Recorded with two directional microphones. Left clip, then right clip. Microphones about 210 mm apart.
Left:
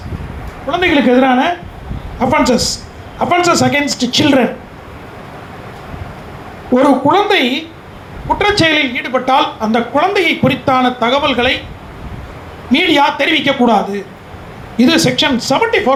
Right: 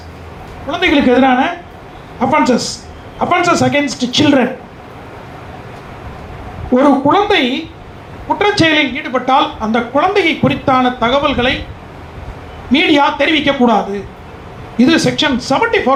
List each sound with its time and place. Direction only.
0.7 s a man's voice: 55° left (ahead or behind)
6.7 s speech: 55° left (ahead or behind)
12.7 s speech: 55° left (ahead or behind)